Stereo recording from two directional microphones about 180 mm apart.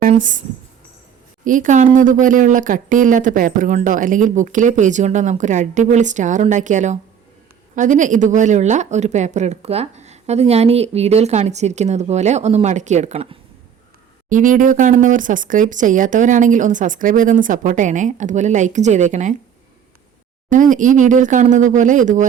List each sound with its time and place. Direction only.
0.1 s speech: 45° right (ahead or behind)
1.5 s speech: 45° right (ahead or behind)
14.3 s speech: 45° right (ahead or behind)
20.5 s speech: 45° right (ahead or behind)